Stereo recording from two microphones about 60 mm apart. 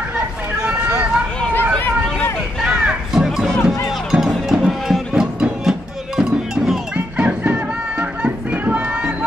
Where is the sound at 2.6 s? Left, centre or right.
Centre.